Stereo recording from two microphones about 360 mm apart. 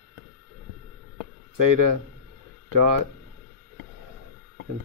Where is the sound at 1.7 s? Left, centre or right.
Right.